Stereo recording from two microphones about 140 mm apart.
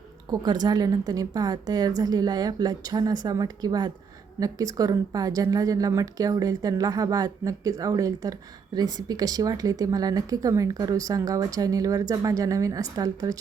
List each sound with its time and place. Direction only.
0.3 s speech: 30° right (ahead or behind)